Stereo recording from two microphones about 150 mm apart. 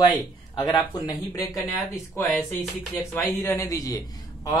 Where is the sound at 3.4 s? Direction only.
20° left (ahead or behind).